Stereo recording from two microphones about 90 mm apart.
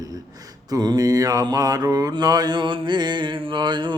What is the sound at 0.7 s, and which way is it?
Mantra, 45° right (ahead or behind).